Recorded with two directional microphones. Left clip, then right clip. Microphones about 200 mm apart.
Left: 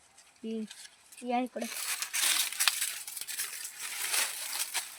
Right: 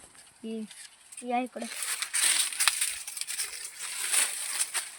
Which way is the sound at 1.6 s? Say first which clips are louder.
Right 1 dB; 20° left (ahead or behind).